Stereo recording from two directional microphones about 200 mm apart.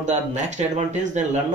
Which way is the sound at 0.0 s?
35° right (ahead or behind).